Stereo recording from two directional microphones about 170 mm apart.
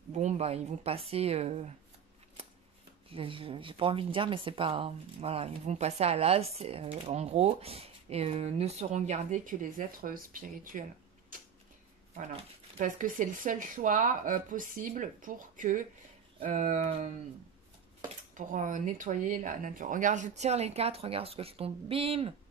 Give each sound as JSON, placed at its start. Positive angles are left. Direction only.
{"t": 0.1, "sound": "speech", "side_deg": -40}
{"t": 3.1, "sound": "speech", "side_deg": -30}
{"t": 12.2, "sound": "speech", "side_deg": -45}
{"t": 18.3, "sound": "speech", "side_deg": -50}